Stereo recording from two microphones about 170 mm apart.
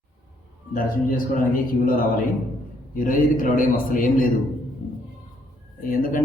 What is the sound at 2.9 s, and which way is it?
Speech, 55° left (ahead or behind).